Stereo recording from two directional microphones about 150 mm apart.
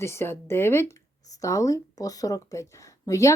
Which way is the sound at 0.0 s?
15° left (ahead or behind).